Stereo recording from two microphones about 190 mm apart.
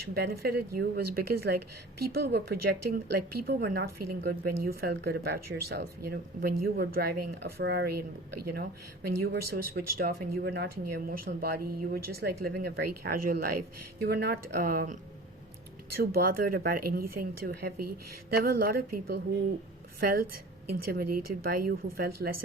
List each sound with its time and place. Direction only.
0.1 s a woman's voice: 55° right (ahead or behind)
9.0 s a woman's voice: 55° right (ahead or behind)
16.0 s speech: 50° right (ahead or behind)